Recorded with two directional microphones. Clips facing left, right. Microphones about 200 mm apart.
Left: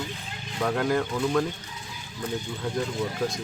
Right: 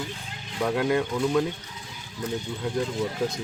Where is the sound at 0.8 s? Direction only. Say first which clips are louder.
Right 1 dB; 20° right (ahead or behind).